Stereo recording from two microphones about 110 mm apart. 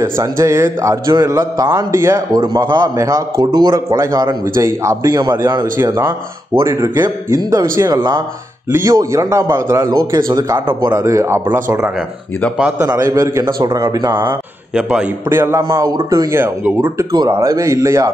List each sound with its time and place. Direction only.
0.0 s speech: 25° right (ahead or behind)
2.3 s a man's voice: 40° right (ahead or behind)
6.6 s speech: 25° right (ahead or behind)
12.8 s a man's voice: 30° right (ahead or behind)
14.7 s a man's voice: 5° right (ahead or behind)
15.2 s speech: 25° right (ahead or behind)
17.1 s a man's voice: 40° right (ahead or behind)
17.4 s speech: 30° right (ahead or behind)